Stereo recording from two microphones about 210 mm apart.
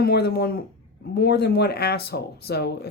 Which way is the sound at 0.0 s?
50° left (ahead or behind).